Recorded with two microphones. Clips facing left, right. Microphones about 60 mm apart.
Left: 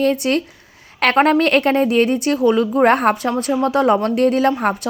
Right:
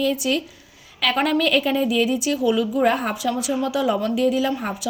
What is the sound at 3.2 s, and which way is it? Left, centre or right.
Speech, left.